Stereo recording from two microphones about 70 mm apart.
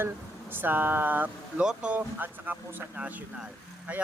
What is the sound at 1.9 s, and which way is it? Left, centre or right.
Speech, right.